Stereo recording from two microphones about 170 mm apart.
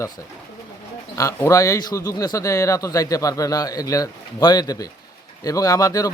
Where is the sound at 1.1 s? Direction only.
20° left (ahead or behind).